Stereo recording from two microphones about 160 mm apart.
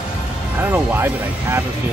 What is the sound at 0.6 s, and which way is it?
Speech, 10° right (ahead or behind).